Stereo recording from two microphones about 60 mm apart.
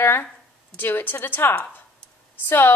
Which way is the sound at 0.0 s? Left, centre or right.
Left.